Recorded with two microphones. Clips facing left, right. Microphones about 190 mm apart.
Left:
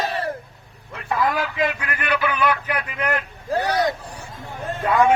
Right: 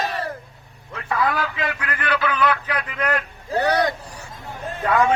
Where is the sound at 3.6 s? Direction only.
60° right (ahead or behind).